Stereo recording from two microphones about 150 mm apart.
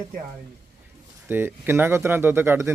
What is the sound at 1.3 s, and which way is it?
Speech, 15° right (ahead or behind).